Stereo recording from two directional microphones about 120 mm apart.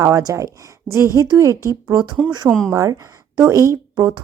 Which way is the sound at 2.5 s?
5° left (ahead or behind).